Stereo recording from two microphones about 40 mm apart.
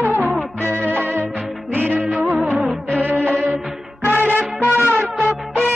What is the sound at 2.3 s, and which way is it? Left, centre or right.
Music, centre.